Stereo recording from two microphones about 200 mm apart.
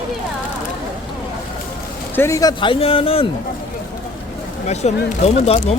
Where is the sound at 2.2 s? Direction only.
15° left (ahead or behind).